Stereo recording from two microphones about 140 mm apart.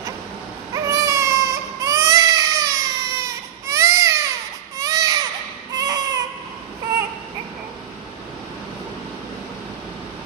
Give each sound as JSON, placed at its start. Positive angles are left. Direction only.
{"t": 0.8, "sound": "baby cry", "side_deg": -25}